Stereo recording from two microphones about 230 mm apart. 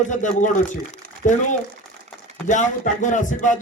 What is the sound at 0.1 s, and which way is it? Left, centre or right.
A man's voice, left.